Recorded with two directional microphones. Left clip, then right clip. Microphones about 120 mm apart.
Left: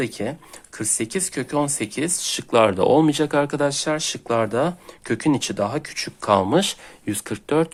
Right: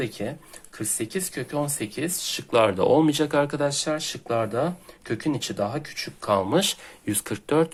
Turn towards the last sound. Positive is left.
turn(degrees=15)  # may be behind; listen again after turning